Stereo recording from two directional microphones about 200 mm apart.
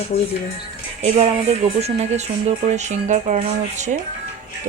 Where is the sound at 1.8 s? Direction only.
30° right (ahead or behind).